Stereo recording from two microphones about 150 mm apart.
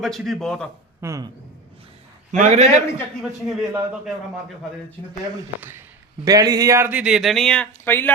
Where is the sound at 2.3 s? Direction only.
55° right (ahead or behind).